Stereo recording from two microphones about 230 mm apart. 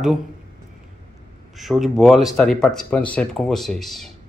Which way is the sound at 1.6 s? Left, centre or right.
Centre.